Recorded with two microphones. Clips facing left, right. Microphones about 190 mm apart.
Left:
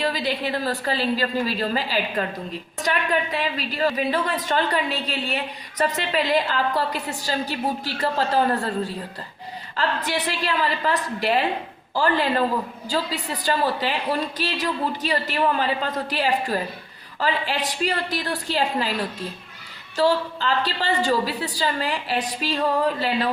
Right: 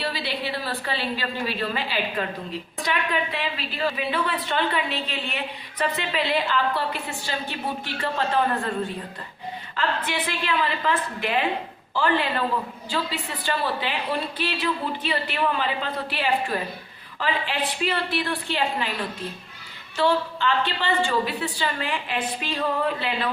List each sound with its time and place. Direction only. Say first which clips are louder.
0.0 s a woman's voice: left 4 dB; 45° left (ahead or behind)
20.0 s a woman's voice: left 2 dB; 40° left (ahead or behind)